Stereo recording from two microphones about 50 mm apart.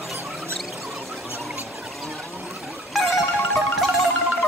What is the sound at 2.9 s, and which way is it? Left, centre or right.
Music, centre.